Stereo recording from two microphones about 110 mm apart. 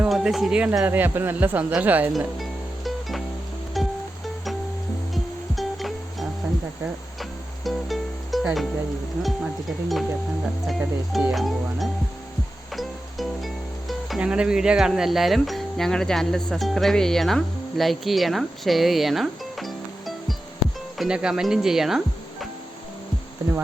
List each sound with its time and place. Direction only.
0.0 s speech: 5° right (ahead or behind)
2.1 s music: centre (ahead or behind)
5.1 s music: centre (ahead or behind)
9.2 s speech: centre (ahead or behind)
12.7 s music: centre (ahead or behind)
14.2 s speech: 10° right (ahead or behind)